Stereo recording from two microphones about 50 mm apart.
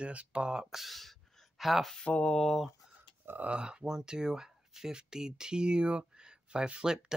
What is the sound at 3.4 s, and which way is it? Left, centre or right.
Speech, centre.